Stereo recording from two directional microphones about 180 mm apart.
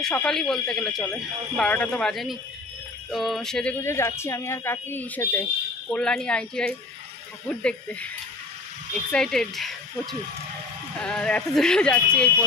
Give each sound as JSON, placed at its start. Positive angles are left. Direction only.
{"t": 0.0, "sound": "speech", "side_deg": 5}
{"t": 9.1, "sound": "speech", "side_deg": 5}
{"t": 11.0, "sound": "speech", "side_deg": 5}